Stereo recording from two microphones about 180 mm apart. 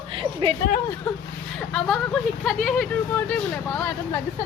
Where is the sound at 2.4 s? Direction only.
5° left (ahead or behind).